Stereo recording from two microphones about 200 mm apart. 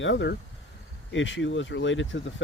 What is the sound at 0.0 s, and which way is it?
Speech, 65° left (ahead or behind).